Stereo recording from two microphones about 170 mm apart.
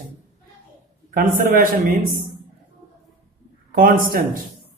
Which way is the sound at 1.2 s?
55° right (ahead or behind).